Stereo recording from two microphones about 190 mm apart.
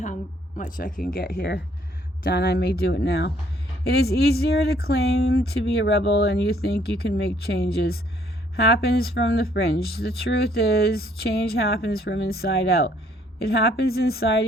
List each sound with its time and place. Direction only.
0.0 s speech: 40° left (ahead or behind)